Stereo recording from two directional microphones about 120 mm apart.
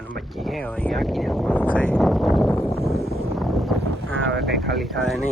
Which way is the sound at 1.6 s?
15° left (ahead or behind).